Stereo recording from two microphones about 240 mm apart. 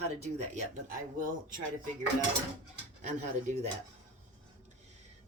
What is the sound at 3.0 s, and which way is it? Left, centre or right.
Speech, right.